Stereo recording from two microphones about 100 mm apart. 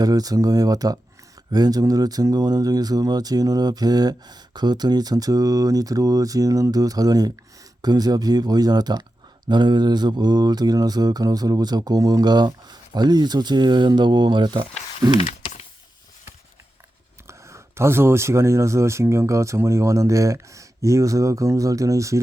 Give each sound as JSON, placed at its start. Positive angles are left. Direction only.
{"t": 0.0, "sound": "speech", "side_deg": -40}
{"t": 7.8, "sound": "mantra", "side_deg": -40}
{"t": 15.2, "sound": "typing", "side_deg": 90}
{"t": 17.2, "sound": "speech", "side_deg": -30}